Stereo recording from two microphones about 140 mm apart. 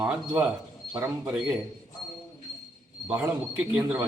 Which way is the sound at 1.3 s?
5° right (ahead or behind).